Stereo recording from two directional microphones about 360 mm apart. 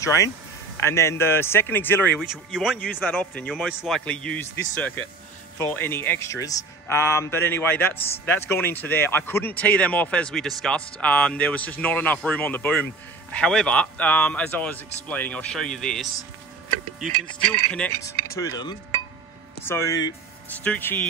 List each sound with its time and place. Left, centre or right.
0.0 s speech: centre
17.5 s speech: centre